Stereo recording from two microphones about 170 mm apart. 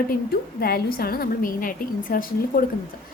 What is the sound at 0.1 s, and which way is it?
A woman's voice, 65° left (ahead or behind).